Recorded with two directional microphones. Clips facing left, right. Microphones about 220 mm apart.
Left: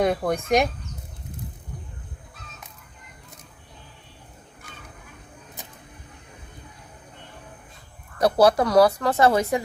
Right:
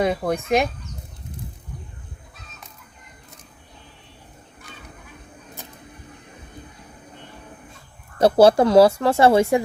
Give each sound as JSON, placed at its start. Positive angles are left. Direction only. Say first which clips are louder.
{"t": 0.0, "sound": "speech", "louder": "right 1 dB", "side_deg": 0}
{"t": 8.2, "sound": "speech", "louder": "right 4 dB", "side_deg": -25}